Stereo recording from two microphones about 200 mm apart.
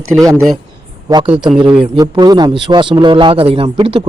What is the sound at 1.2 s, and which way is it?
Speech, 5° right (ahead or behind).